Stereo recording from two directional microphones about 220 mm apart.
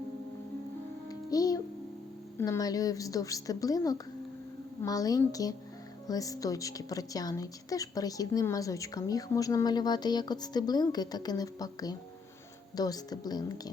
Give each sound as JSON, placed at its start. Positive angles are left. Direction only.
{"t": 1.0, "sound": "music", "side_deg": 15}
{"t": 2.4, "sound": "a woman's voice", "side_deg": 15}